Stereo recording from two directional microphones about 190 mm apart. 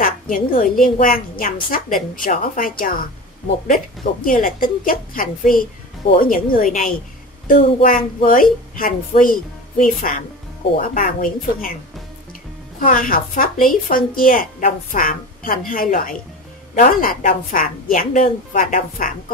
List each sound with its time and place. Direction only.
0.0 s a woman's voice: 45° left (ahead or behind)
12.8 s a woman's voice: 45° left (ahead or behind)